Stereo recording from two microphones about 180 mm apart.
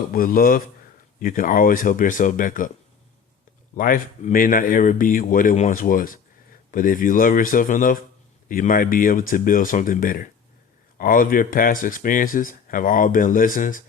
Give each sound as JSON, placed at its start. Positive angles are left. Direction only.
{"t": 0.1, "sound": "speech", "side_deg": 55}
{"t": 3.8, "sound": "speech", "side_deg": 50}